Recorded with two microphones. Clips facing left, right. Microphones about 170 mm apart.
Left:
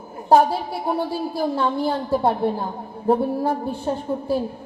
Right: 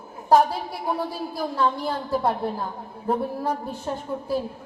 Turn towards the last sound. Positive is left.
turn(degrees=30)  # may be behind; listen again after turning